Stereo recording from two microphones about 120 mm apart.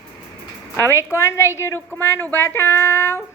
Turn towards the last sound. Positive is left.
turn(degrees=20)  # may be behind; listen again after turning